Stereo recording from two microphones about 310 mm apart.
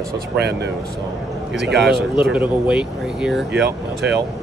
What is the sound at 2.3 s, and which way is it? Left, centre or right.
Speech, centre.